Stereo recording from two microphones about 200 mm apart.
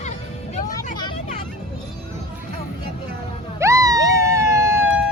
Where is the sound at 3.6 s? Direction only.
15° right (ahead or behind).